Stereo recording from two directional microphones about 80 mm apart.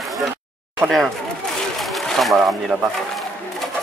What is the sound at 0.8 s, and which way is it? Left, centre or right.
Speech, centre.